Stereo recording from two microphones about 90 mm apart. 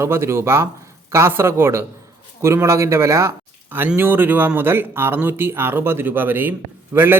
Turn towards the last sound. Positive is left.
turn(degrees=-25)  # may be behind; listen again after turning